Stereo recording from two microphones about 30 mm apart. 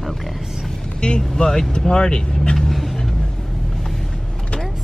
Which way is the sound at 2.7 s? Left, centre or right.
Centre.